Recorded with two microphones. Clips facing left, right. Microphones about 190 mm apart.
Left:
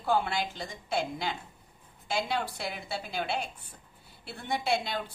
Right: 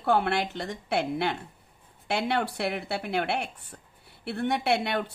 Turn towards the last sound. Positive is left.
turn(degrees=-65)  # may be behind; listen again after turning